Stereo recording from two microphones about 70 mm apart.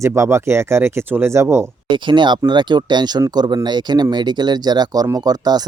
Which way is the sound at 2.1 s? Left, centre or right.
Right.